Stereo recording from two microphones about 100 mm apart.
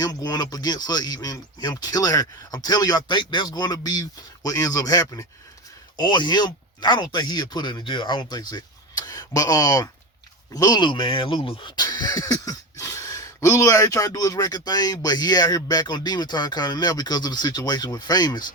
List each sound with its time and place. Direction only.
0.0 s speech: 40° left (ahead or behind)
6.0 s speech: 45° left (ahead or behind); by 11.7 s 65° left (ahead or behind)
11.8 s speech: 40° left (ahead or behind)